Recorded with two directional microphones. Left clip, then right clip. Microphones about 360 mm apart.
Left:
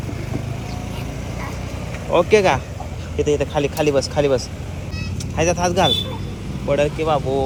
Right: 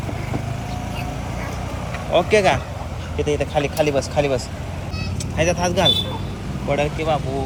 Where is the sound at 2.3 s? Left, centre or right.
Centre.